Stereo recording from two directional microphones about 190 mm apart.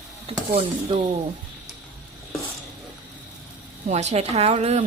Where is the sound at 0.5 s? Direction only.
25° right (ahead or behind).